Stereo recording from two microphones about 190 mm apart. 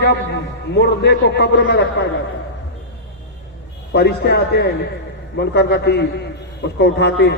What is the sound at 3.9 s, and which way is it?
A man's voice, 60° left (ahead or behind).